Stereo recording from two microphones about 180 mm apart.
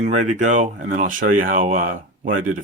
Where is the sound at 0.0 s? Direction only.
40° right (ahead or behind).